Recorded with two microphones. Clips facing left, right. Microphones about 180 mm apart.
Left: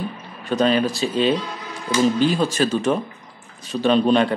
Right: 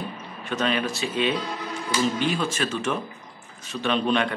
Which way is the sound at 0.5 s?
35° left (ahead or behind).